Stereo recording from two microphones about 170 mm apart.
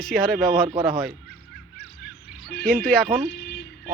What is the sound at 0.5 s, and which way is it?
Speech, 60° right (ahead or behind).